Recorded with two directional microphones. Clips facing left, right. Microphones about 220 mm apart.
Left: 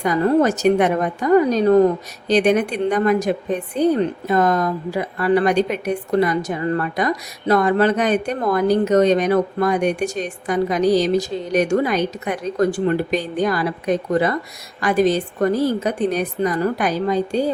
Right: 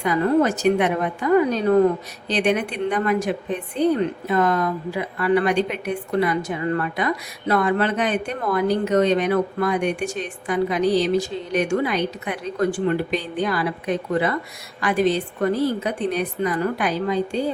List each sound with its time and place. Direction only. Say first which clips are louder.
0.0 s a woman's voice: left 2 dB; 40° left (ahead or behind)